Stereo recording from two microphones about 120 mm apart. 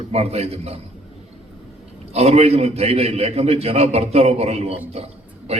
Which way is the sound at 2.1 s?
60° right (ahead or behind).